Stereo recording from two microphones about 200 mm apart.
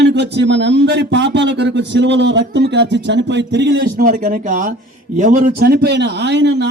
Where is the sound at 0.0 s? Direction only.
60° right (ahead or behind).